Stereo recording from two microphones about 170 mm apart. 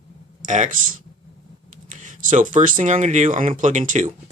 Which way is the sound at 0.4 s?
45° right (ahead or behind).